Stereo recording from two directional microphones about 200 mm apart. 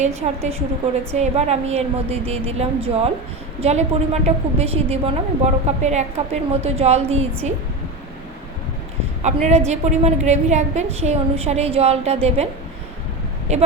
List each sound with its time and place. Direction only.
0.0 s a woman's voice: 35° right (ahead or behind)
9.2 s a woman's voice: 35° right (ahead or behind)
13.5 s a woman's voice: 35° right (ahead or behind)